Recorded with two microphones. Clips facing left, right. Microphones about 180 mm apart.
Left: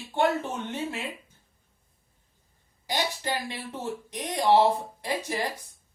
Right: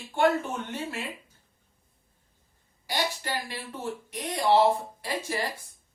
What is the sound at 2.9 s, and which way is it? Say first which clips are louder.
A woman's voice: left 1 dB; 20° left (ahead or behind).